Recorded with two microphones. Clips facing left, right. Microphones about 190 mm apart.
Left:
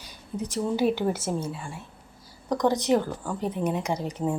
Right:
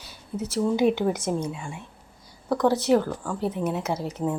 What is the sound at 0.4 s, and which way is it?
A woman's voice, 10° left (ahead or behind).